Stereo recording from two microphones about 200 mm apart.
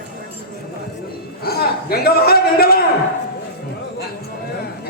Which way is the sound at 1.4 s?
50° left (ahead or behind).